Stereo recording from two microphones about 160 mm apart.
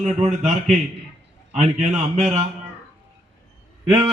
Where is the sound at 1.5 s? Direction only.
45° right (ahead or behind).